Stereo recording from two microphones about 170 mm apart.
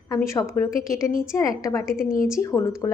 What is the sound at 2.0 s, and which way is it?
Speech, 55° left (ahead or behind).